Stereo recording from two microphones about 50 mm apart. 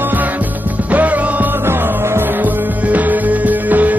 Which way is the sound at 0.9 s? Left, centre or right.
Right.